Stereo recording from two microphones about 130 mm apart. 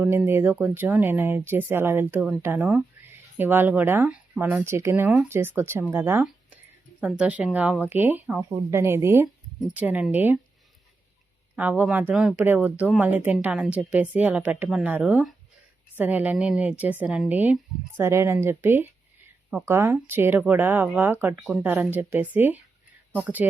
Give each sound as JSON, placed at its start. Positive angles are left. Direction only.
{"t": 0.0, "sound": "speech", "side_deg": -15}
{"t": 11.5, "sound": "speech", "side_deg": -10}